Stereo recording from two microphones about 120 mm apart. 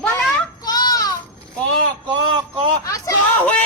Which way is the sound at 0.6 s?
35° left (ahead or behind).